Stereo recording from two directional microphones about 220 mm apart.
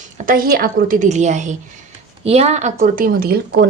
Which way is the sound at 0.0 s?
35° right (ahead or behind).